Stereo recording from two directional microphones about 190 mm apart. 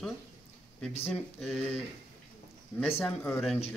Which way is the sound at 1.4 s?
Centre (ahead or behind).